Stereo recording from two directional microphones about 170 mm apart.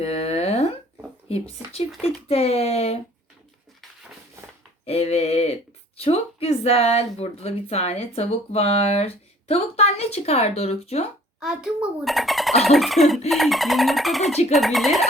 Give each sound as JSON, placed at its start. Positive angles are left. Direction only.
{"t": 0.0, "sound": "a sound", "side_deg": 35}
{"t": 1.3, "sound": "speech", "side_deg": 35}
{"t": 4.9, "sound": "speech", "side_deg": 40}
{"t": 11.3, "sound": "speech", "side_deg": -5}